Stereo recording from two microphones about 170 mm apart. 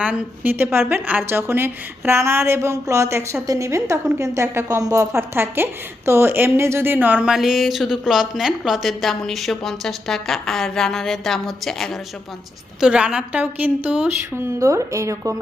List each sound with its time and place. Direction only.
0.0 s a woman's voice: 10° right (ahead or behind)